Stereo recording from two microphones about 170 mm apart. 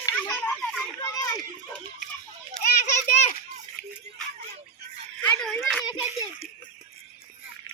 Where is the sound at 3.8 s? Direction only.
80° left.